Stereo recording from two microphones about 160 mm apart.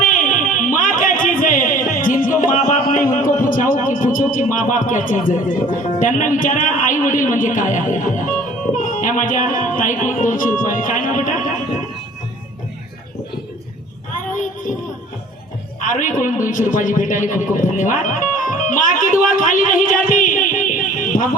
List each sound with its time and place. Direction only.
0.0 s a sound: 55° left (ahead or behind)
3.4 s speech: 60° left (ahead or behind)
14.3 s child singing: 55° left (ahead or behind)
15.8 s a man's voice: 55° left (ahead or behind)